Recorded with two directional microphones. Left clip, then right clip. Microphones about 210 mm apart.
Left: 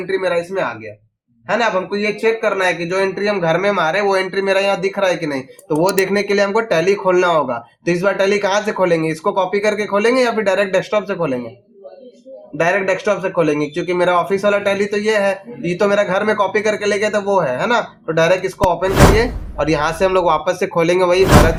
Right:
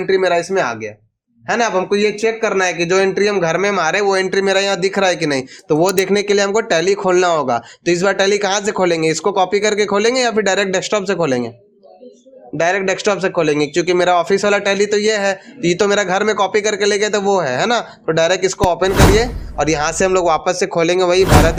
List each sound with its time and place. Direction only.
0.1 s speech: 45° right (ahead or behind)
12.5 s speech: 45° right (ahead or behind)